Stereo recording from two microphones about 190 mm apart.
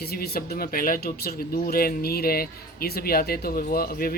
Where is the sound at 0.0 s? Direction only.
55° left (ahead or behind).